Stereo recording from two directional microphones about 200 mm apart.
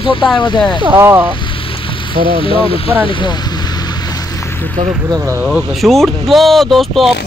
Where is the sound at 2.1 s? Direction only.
25° left (ahead or behind).